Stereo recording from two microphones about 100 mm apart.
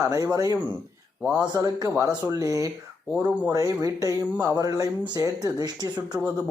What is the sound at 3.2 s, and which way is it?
Speech, 20° right (ahead or behind).